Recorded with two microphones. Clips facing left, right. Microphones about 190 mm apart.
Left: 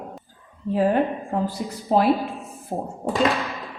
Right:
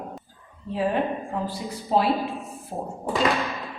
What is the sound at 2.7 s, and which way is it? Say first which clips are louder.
Speech: left 4 dB; 60° left (ahead or behind).